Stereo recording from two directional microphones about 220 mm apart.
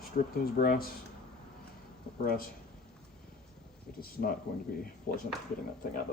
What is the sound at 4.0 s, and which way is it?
Speech, 40° left (ahead or behind).